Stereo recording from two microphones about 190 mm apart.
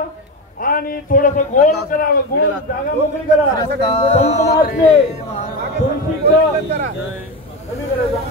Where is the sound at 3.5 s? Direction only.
25° left (ahead or behind).